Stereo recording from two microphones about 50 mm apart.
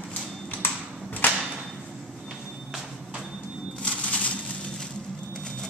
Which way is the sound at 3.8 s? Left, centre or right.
Left.